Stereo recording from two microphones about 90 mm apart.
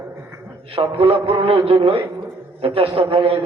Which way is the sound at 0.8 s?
90° right.